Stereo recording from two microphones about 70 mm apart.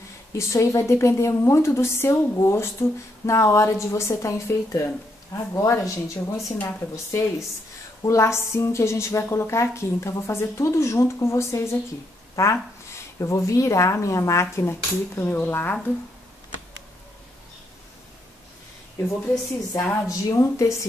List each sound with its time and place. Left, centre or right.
0.3 s a woman's voice: left
19.0 s a woman's voice: left